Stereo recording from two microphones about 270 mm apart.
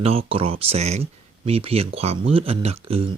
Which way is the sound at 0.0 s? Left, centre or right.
Right.